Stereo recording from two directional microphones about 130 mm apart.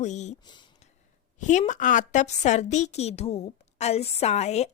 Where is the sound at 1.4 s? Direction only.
70° left (ahead or behind).